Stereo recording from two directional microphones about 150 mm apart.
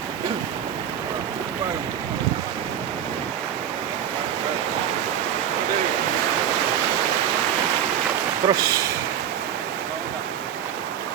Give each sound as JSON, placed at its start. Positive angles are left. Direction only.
{"t": 8.4, "sound": "speech", "side_deg": -20}